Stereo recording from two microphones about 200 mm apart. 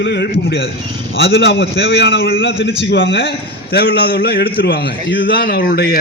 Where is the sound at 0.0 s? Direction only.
55° left (ahead or behind).